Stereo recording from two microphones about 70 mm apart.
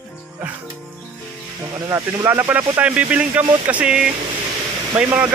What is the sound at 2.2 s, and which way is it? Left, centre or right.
Speech, right.